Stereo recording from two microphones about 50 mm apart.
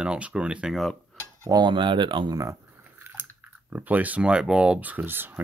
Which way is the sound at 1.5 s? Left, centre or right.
Right.